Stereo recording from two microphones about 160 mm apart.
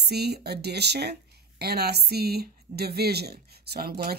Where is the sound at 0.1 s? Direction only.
90° right.